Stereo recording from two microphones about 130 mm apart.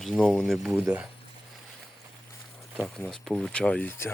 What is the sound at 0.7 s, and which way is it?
Speech, 15° right (ahead or behind).